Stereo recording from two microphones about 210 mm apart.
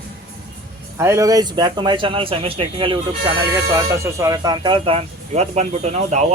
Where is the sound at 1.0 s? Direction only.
15° right (ahead or behind).